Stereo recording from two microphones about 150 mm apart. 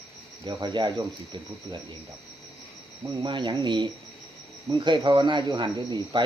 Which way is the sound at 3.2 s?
30° right (ahead or behind).